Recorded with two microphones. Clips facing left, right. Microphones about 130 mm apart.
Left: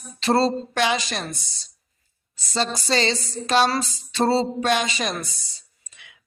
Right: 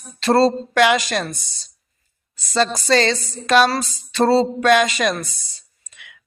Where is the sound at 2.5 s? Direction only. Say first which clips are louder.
Right 6 dB; 45° right (ahead or behind).